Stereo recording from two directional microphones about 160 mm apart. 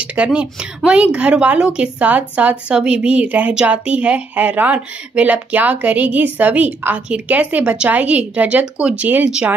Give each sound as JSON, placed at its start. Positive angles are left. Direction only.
{"t": 0.0, "sound": "speech", "side_deg": -10}